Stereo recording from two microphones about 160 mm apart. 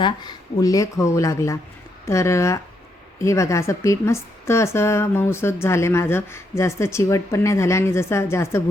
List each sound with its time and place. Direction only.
0.0 s a woman's voice: 25° left (ahead or behind)